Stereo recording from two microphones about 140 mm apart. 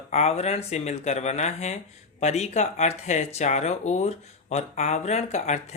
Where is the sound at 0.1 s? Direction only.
50° left (ahead or behind).